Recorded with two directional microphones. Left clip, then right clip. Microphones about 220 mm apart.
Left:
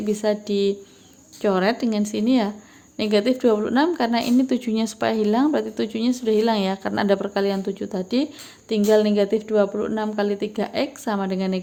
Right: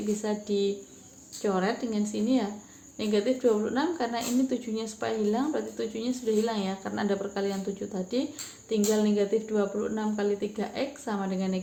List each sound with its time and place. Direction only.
0.2 s speech: 50° left (ahead or behind)